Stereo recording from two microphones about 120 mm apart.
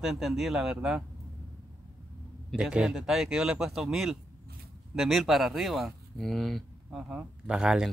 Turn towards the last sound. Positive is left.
turn(degrees=-5)  # may be behind; listen again after turning